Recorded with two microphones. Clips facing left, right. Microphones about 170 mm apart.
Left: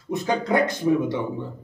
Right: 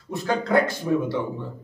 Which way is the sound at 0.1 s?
20° left (ahead or behind).